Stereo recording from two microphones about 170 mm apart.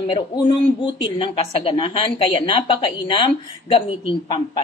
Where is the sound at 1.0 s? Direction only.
30° left (ahead or behind).